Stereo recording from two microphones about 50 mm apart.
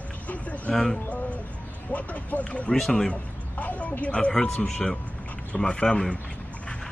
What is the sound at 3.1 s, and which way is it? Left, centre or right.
Speech, left.